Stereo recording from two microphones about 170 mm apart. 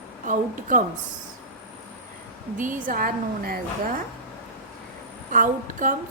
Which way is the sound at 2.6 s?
50° right (ahead or behind).